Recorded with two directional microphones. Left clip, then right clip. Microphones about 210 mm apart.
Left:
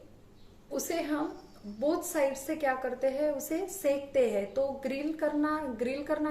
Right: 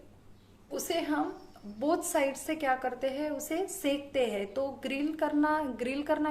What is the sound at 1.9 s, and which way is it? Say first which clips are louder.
A woman's voice: even; 45° right (ahead or behind).